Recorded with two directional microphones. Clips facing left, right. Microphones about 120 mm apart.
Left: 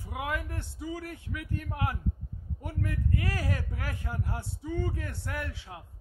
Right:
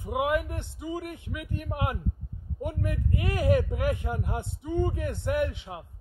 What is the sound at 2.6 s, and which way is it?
Speech, 20° right (ahead or behind).